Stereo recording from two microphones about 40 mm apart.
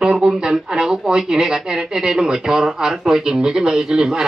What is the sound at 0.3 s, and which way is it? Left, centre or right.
Speech, centre.